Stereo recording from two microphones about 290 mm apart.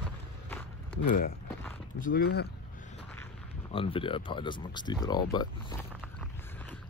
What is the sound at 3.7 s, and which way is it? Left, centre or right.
Speech, centre.